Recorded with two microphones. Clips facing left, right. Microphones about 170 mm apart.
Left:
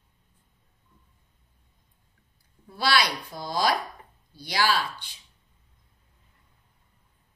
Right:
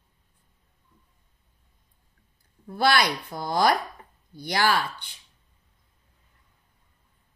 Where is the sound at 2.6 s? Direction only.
55° right (ahead or behind).